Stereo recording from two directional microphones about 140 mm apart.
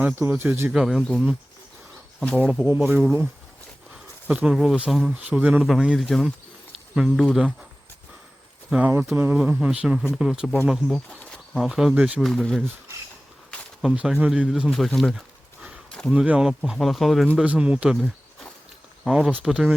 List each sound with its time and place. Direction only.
0.0 s speech: 15° right (ahead or behind)
0.7 s speech: 5° right (ahead or behind)
2.7 s speech: 10° right (ahead or behind)
4.3 s speech: 10° right (ahead or behind)
9.1 s speech: 10° right (ahead or behind)
12.2 s speech: centre (ahead or behind)
13.8 s speech: 5° right (ahead or behind)
15.9 s a sound: 5° left (ahead or behind)
16.1 s speech: 5° right (ahead or behind)